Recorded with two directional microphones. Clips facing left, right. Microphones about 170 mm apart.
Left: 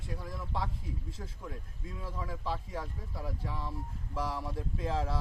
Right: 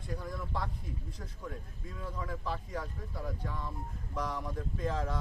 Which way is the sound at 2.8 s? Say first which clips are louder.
Even; centre (ahead or behind).